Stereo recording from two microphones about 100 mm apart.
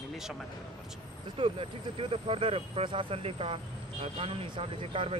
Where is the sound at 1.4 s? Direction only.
70° right (ahead or behind).